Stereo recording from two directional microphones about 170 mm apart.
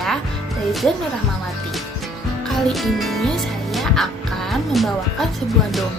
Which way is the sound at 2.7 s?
Centre (ahead or behind).